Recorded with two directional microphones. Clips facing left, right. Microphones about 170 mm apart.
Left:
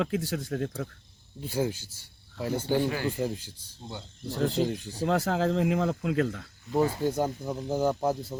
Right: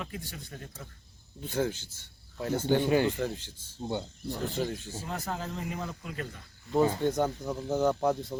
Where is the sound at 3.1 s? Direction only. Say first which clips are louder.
Left 2 dB; 10° left (ahead or behind).